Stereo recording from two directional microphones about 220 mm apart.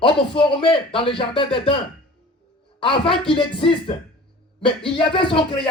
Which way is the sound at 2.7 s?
25° left (ahead or behind).